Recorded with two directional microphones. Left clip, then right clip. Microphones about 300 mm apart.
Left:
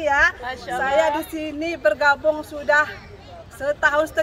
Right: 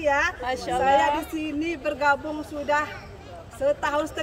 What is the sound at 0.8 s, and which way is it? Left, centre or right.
A woman's voice, centre.